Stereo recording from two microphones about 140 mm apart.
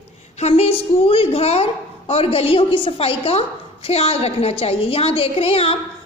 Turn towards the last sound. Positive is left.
turn(degrees=45)  # may be behind; listen again after turning